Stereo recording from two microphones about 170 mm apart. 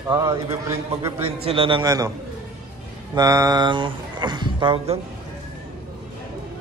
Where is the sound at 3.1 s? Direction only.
20° right (ahead or behind).